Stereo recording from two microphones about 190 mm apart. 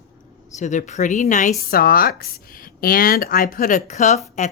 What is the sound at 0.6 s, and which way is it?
Speech, 40° left (ahead or behind).